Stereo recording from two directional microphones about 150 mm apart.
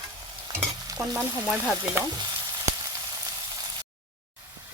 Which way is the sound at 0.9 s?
5° right (ahead or behind).